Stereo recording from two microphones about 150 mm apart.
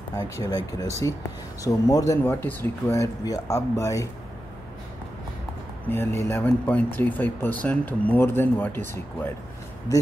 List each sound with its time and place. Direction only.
0.1 s speech: 25° left (ahead or behind)
5.9 s speech: 15° left (ahead or behind)